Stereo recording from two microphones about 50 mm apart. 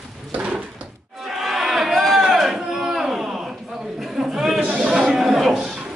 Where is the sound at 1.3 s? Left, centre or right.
Centre.